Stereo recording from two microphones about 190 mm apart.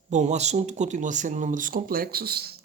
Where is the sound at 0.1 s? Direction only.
40° right (ahead or behind).